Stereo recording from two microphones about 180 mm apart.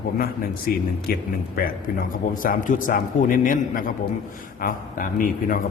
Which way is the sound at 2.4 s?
50° left (ahead or behind).